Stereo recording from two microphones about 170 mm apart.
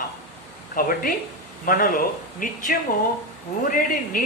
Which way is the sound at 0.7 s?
55° left (ahead or behind).